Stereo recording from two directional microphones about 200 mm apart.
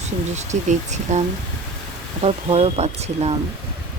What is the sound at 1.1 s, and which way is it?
Speech, 35° right (ahead or behind).